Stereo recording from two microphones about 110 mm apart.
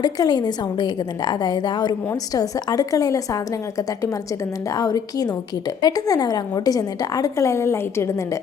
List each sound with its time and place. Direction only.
0.0 s a woman's voice: 40° left (ahead or behind)